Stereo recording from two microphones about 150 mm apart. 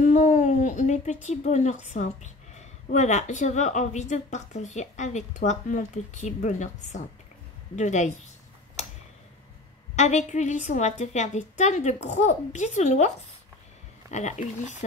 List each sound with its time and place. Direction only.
0.0 s a sound: 50° left (ahead or behind)
2.9 s a woman's voice: 50° left (ahead or behind)
9.9 s a woman's voice: 50° left (ahead or behind)
14.1 s a woman's voice: 50° left (ahead or behind)